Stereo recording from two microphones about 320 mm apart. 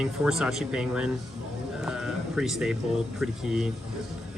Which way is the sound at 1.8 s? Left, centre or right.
Centre.